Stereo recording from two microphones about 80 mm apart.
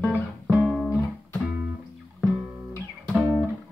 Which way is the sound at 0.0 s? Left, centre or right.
Right.